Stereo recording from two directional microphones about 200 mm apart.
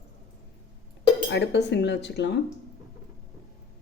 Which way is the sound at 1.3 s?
60° left (ahead or behind).